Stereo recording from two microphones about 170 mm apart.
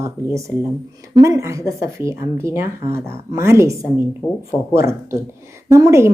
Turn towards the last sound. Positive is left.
turn(degrees=-15)  # may be behind; listen again after turning